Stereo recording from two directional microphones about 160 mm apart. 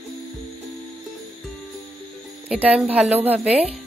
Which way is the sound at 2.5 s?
5° right (ahead or behind).